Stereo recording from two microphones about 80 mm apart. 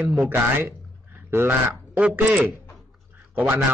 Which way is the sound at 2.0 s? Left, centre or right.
Centre.